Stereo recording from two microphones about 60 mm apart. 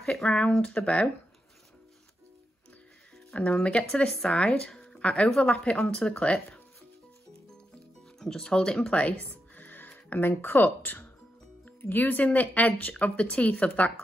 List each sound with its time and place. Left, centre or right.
0.0 s a sound: centre
0.3 s speech: centre
3.3 s speech: left
8.2 s speech: centre